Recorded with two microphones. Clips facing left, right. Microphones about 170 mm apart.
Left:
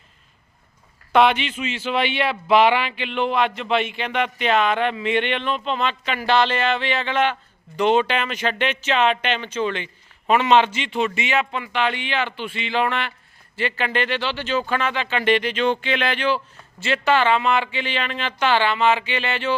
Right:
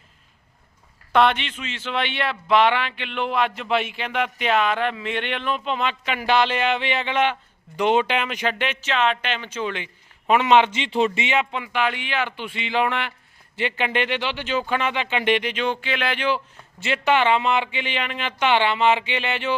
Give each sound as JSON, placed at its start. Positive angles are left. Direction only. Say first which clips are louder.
{"t": 1.1, "sound": "speech", "louder": "left 2 dB", "side_deg": 0}